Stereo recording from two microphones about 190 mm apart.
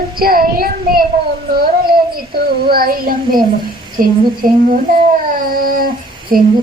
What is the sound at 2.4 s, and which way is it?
A child's voice, 50° right (ahead or behind).